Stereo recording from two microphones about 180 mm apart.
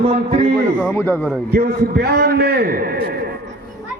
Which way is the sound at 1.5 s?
60° right (ahead or behind).